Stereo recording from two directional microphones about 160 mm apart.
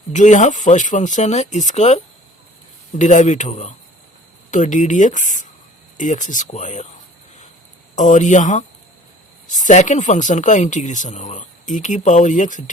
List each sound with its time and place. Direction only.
0.1 s speech: 50° left (ahead or behind)
3.0 s speech: 50° left (ahead or behind)
7.9 s speech: 50° left (ahead or behind)